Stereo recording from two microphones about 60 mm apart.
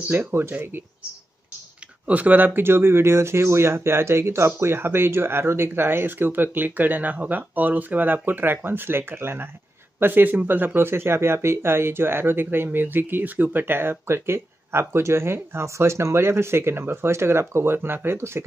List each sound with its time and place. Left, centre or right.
0.3 s speech: right
2.0 s speech: right